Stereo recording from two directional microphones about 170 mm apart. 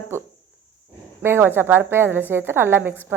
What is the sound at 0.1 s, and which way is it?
A woman's voice, 15° right (ahead or behind).